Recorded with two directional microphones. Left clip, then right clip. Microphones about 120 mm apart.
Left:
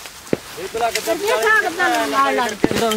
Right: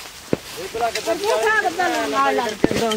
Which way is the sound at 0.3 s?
45° left (ahead or behind).